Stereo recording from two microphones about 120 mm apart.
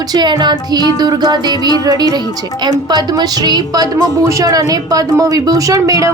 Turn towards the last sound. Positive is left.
turn(degrees=-30)  # may be behind; listen again after turning